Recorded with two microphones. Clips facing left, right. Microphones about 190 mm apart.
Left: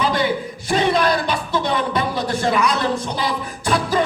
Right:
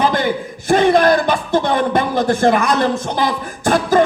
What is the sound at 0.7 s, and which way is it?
Speech, 50° right (ahead or behind).